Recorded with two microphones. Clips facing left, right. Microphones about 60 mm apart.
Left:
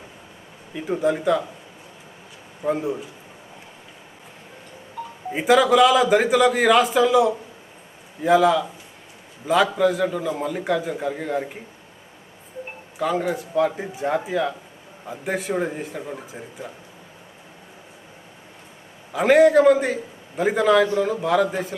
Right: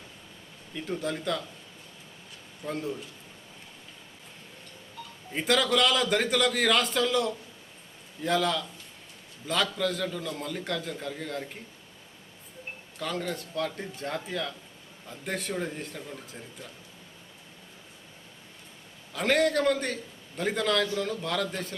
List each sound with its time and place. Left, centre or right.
0.7 s a man's voice: centre
2.6 s a man's voice: centre
5.0 s a sound: left
5.3 s a man's voice: centre
13.0 s a man's voice: centre
19.1 s a man's voice: centre